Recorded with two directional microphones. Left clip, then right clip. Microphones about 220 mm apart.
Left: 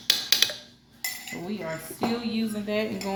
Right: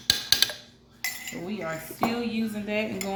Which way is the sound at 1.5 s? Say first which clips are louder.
Right 1 dB; 20° left (ahead or behind).